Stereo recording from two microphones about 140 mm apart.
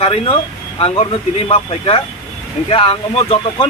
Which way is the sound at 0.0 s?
45° left (ahead or behind).